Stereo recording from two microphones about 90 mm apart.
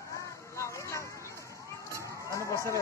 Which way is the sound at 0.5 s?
35° left (ahead or behind).